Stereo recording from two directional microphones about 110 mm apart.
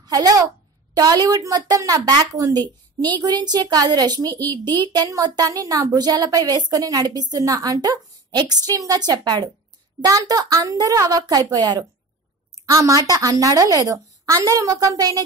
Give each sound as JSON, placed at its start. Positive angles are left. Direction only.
{"t": 0.0, "sound": "a child's voice", "side_deg": -35}